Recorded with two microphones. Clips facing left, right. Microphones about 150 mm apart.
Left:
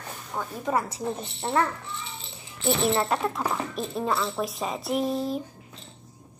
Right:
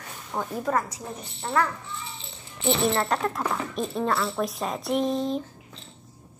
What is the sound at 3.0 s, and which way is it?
Speech, 5° left (ahead or behind).